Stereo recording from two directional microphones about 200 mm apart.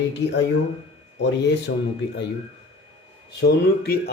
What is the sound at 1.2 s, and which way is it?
Speech, 60° left (ahead or behind).